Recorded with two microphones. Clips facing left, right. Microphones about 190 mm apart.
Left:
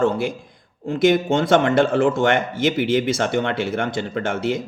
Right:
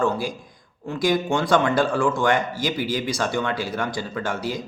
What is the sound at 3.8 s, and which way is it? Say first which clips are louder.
Speech: left 4 dB; 55° left (ahead or behind).